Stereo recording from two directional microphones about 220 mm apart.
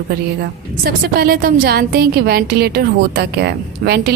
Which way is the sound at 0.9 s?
45° right (ahead or behind).